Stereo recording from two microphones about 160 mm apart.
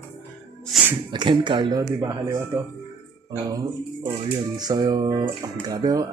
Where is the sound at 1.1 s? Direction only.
30° right (ahead or behind).